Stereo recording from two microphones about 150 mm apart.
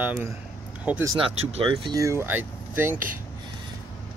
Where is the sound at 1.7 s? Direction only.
30° right (ahead or behind); by 3.0 s 15° right (ahead or behind).